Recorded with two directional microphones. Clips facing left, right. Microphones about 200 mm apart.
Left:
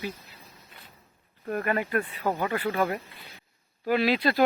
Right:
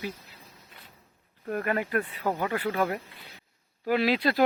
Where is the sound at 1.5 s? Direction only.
5° right (ahead or behind).